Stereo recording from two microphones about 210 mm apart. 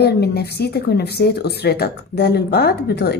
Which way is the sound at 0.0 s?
50° left (ahead or behind).